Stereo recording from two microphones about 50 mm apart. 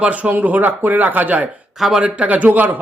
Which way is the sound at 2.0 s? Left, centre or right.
Right.